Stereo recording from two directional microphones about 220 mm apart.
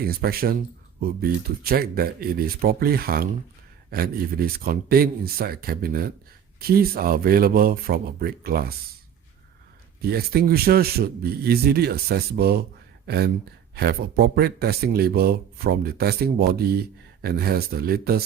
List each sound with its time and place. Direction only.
0.0 s speech: 45° right (ahead or behind)
10.0 s speech: 45° right (ahead or behind)